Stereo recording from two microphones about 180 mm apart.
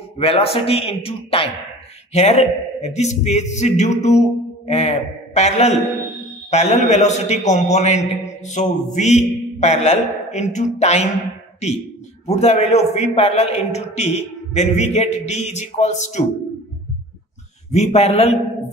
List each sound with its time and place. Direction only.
0.2 s a man's voice: 30° left (ahead or behind)
12.3 s a man's voice: 35° left (ahead or behind)
17.6 s a man's voice: 35° left (ahead or behind)